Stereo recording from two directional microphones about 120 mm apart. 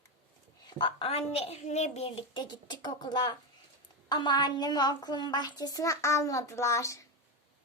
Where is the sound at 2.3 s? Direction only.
40° left (ahead or behind).